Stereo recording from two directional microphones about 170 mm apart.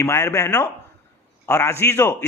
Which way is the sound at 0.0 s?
15° left (ahead or behind).